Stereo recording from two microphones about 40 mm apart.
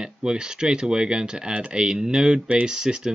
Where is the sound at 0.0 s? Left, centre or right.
Centre.